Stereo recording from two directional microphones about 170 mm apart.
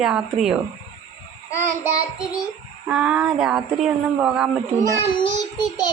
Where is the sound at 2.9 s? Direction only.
5° right (ahead or behind).